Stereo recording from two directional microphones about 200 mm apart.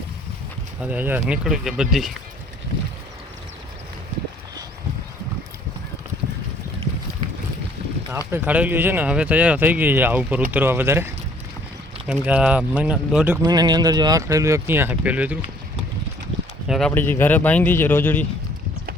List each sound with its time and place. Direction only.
0.8 s speech: 10° right (ahead or behind)
8.3 s speech: 5° right (ahead or behind)
13.4 s speech: 20° right (ahead or behind)
16.6 s speech: centre (ahead or behind)